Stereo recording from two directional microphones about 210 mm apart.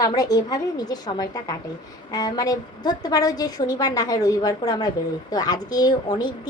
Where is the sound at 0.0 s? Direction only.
15° left (ahead or behind).